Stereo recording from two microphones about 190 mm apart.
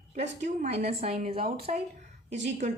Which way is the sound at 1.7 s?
40° right (ahead or behind).